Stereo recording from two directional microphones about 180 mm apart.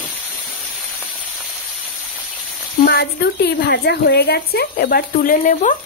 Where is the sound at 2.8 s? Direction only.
65° left (ahead or behind); by 5.8 s 45° left (ahead or behind).